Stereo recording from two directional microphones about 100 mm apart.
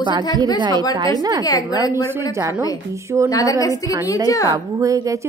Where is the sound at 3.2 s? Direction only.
35° left (ahead or behind).